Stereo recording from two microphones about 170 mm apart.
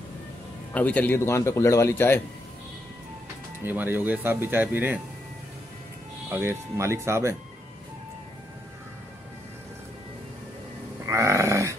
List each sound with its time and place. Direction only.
0.7 s a man's voice: 10° left (ahead or behind)
3.6 s speech: 10° right (ahead or behind)
6.2 s speech: 15° right (ahead or behind)
11.1 s a sound: 15° right (ahead or behind)